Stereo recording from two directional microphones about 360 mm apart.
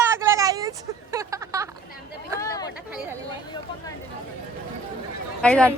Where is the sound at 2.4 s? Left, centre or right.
Centre.